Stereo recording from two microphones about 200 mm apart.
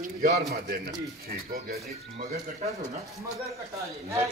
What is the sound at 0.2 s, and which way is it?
Speech, 45° right (ahead or behind).